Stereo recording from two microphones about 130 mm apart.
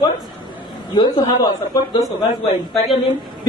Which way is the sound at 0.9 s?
30° left (ahead or behind).